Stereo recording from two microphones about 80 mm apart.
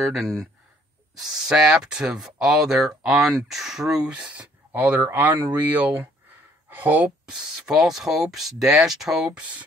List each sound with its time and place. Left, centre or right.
0.0 s speech: centre; by 7.1 s right
7.2 s speech: centre
9.4 s speech: centre